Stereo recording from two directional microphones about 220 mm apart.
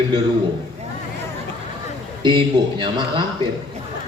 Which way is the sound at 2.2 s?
20° right (ahead or behind).